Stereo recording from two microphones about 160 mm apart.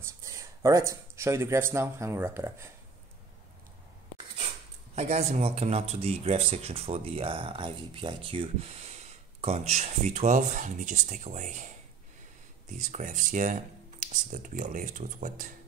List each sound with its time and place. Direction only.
0.0 s speech: 20° right (ahead or behind)
4.9 s speech: 40° right (ahead or behind)
12.7 s speech: 50° right (ahead or behind)